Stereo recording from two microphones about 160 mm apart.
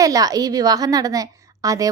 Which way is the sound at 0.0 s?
20° right (ahead or behind).